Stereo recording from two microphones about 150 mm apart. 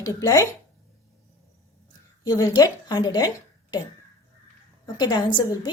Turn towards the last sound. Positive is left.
turn(degrees=30)  # may be behind; listen again after turning